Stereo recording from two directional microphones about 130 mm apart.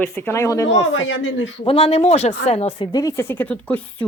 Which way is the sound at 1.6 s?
45° left (ahead or behind).